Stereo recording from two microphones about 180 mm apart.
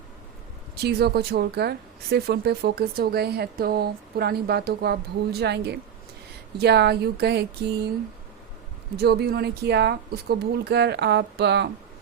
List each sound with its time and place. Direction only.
0.8 s speech: 60° right (ahead or behind)
9.0 s speech: 65° right (ahead or behind)